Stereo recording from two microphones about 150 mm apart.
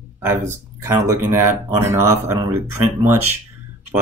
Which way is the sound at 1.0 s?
15° right (ahead or behind).